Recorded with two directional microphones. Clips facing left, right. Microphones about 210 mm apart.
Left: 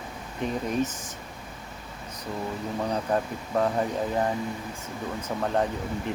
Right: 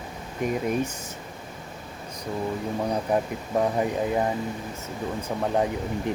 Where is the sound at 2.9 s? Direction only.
10° right (ahead or behind).